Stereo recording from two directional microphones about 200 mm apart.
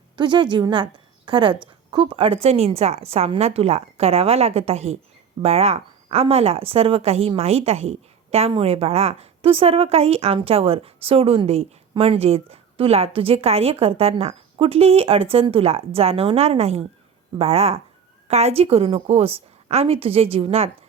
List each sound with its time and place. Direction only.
0.2 s a woman's voice: 25° right (ahead or behind)